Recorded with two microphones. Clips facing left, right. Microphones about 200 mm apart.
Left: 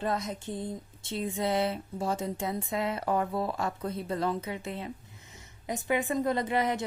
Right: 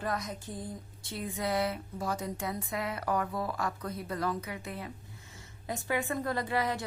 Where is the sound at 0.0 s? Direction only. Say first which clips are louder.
Left 4 dB; 25° left (ahead or behind).